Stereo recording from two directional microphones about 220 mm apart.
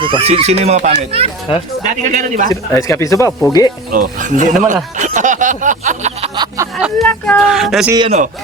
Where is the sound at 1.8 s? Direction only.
35° right (ahead or behind).